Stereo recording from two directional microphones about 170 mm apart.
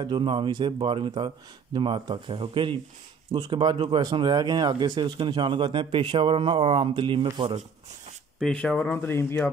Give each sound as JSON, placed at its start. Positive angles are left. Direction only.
{"t": 0.0, "sound": "speech", "side_deg": -25}
{"t": 8.4, "sound": "speech", "side_deg": 5}